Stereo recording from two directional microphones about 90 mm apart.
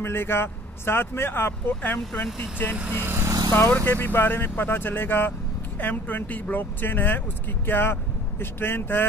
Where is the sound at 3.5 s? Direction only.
25° left (ahead or behind).